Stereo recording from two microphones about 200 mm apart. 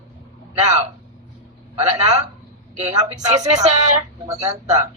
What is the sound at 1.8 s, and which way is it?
Speech, 35° right (ahead or behind).